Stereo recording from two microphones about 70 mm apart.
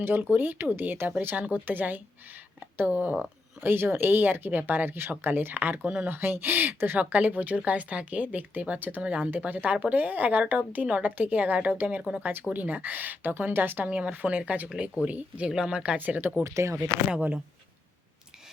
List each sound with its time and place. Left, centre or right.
0.0 s speech: right
3.6 s speech: right; by 9.3 s centre
9.3 s speech: right
16.0 s speech: right
16.4 s speech: right
17.1 s speech: centre